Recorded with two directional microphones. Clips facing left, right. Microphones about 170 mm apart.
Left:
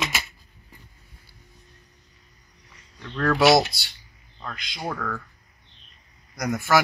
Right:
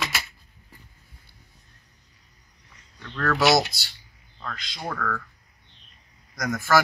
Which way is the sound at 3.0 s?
15° left (ahead or behind).